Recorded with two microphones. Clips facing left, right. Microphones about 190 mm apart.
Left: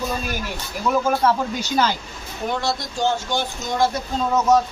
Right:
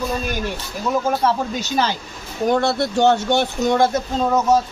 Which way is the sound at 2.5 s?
55° right (ahead or behind).